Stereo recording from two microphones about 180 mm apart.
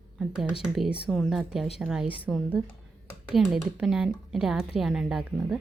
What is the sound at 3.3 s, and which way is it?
A woman's voice, centre (ahead or behind).